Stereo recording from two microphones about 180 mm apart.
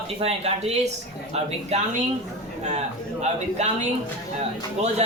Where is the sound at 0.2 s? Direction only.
35° right (ahead or behind).